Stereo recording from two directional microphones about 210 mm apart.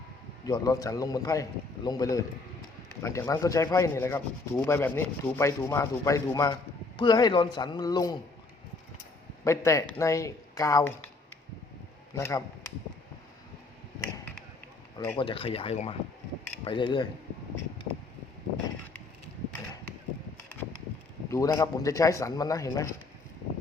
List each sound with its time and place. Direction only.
0.4 s rub: 15° left (ahead or behind)
9.4 s a man's voice: 15° left (ahead or behind)
10.0 s rub: 15° left (ahead or behind)
12.1 s a man's voice: 15° left (ahead or behind)
14.9 s speech: 10° left (ahead or behind)
15.2 s speech: 25° left (ahead or behind)
21.2 s rub: 15° left (ahead or behind)